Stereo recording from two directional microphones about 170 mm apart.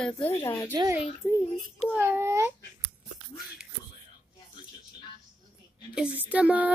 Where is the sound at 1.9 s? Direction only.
15° right (ahead or behind).